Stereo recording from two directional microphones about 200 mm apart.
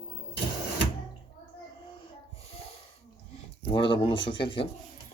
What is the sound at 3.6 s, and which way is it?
Speech, 25° left (ahead or behind).